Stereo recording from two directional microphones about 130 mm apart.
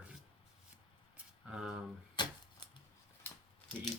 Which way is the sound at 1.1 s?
5° right (ahead or behind).